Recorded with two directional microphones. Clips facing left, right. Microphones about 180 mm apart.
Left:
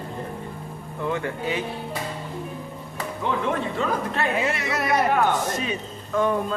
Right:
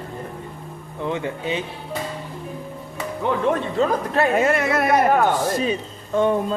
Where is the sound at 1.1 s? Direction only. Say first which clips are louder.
Right 2 dB; 20° right (ahead or behind).